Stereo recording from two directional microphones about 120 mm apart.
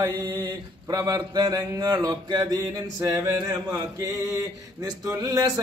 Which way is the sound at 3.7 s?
25° right (ahead or behind).